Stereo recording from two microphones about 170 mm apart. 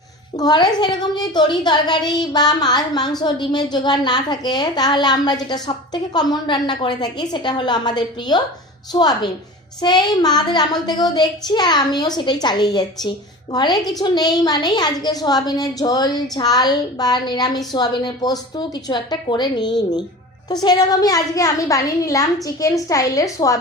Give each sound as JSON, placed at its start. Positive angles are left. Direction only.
{"t": 0.3, "sound": "a woman's voice", "side_deg": 25}